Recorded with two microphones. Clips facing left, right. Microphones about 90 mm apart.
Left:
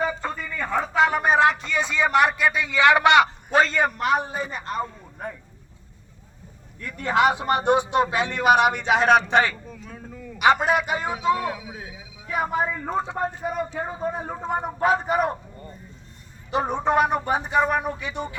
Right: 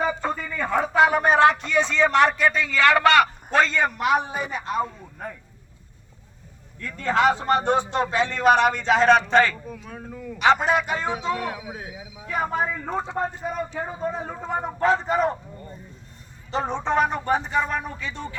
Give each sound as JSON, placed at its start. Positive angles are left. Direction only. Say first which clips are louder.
{"t": 0.0, "sound": "speech", "louder": "right 2 dB", "side_deg": -5}
{"t": 3.5, "sound": "speech", "louder": "left 1 dB", "side_deg": 5}
{"t": 6.8, "sound": "speech", "louder": "even", "side_deg": 15}
{"t": 9.6, "sound": "speech", "louder": "right 3 dB", "side_deg": -10}
{"t": 10.3, "sound": "speech", "louder": "even", "side_deg": 10}
{"t": 11.5, "sound": "speech", "louder": "right 2 dB", "side_deg": -20}
{"t": 12.2, "sound": "speech", "louder": "left 1 dB", "side_deg": 5}
{"t": 16.5, "sound": "speech", "louder": "left 2 dB", "side_deg": 15}